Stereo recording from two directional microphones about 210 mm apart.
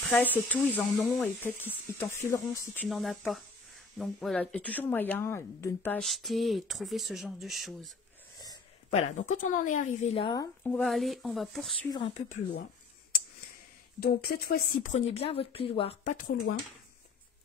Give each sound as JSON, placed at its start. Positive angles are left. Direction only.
{"t": 0.0, "sound": "a woman's voice", "side_deg": 5}
{"t": 8.9, "sound": "a woman's voice", "side_deg": 35}
{"t": 13.9, "sound": "speech", "side_deg": 45}